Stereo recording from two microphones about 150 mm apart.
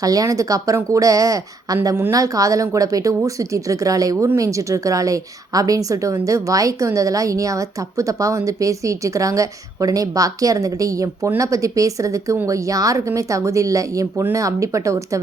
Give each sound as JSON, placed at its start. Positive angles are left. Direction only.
{"t": 0.0, "sound": "speech", "side_deg": -25}